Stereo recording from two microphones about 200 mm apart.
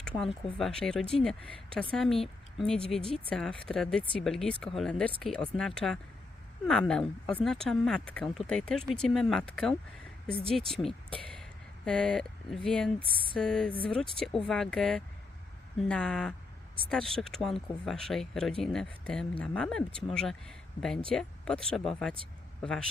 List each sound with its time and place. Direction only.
0.6 s speech: 5° left (ahead or behind)
13.0 s a sound: 25° right (ahead or behind)
13.3 s speech: 5° left (ahead or behind)